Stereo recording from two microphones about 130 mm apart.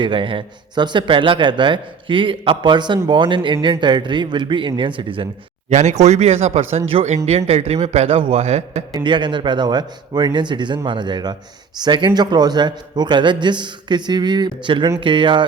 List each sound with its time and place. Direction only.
0.0 s speech: 40° right (ahead or behind)
5.7 s speech: 60° right (ahead or behind)
9.0 s speech: 35° right (ahead or behind)